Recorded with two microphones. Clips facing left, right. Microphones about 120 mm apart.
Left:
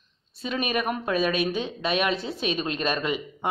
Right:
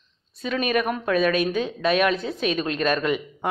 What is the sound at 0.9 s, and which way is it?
Speech, 25° left (ahead or behind).